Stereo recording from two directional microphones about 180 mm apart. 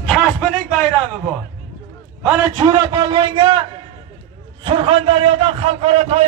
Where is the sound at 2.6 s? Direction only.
25° right (ahead or behind).